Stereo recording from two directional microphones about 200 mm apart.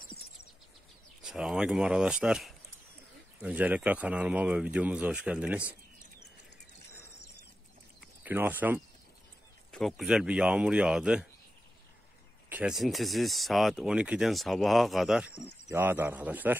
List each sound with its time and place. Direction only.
1.2 s speech: 5° right (ahead or behind)
8.0 s speech: 10° right (ahead or behind)
9.7 s speech: centre (ahead or behind)
12.4 s speech: 5° right (ahead or behind)